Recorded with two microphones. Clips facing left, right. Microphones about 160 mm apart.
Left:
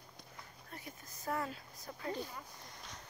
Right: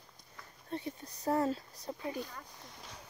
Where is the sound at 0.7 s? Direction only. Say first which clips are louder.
Right 12 dB; 30° right (ahead or behind).